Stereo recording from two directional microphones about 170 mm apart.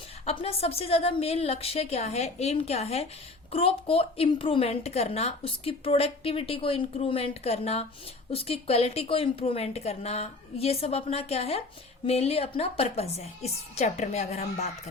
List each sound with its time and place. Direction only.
0.3 s a woman's voice: 35° left (ahead or behind)